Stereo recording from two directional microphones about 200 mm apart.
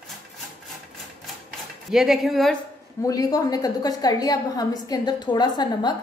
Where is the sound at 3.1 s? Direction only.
20° left (ahead or behind).